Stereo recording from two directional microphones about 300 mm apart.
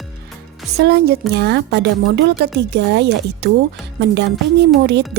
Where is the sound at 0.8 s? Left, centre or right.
Right.